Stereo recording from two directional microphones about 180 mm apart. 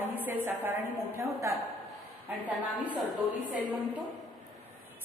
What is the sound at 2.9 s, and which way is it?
Speech, 5° left (ahead or behind).